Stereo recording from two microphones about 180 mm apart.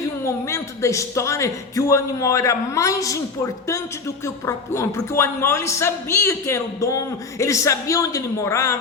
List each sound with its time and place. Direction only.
0.3 s a man's voice: 15° left (ahead or behind)